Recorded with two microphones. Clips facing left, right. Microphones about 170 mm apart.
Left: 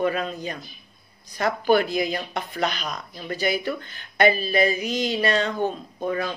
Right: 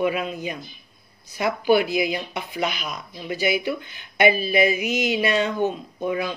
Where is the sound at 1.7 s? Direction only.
10° right (ahead or behind).